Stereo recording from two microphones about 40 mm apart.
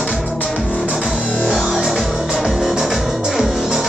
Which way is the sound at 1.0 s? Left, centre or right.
Left.